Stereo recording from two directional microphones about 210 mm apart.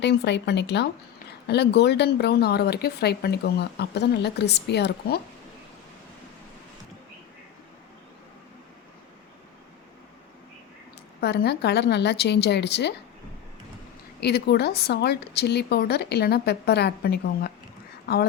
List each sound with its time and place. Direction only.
0.0 s speech: 55° left (ahead or behind)
11.2 s speech: 50° left (ahead or behind)
14.2 s speech: 50° left (ahead or behind)